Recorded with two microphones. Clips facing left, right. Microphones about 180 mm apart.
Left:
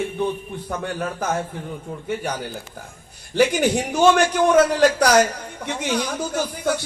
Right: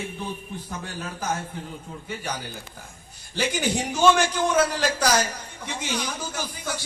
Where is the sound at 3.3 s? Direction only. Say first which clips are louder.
Left 8 dB; 55° left (ahead or behind).